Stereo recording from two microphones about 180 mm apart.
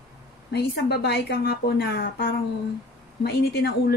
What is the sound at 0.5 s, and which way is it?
A woman's voice, 65° left (ahead or behind).